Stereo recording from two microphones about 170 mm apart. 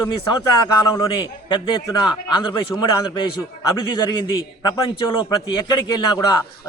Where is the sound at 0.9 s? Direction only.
25° left (ahead or behind).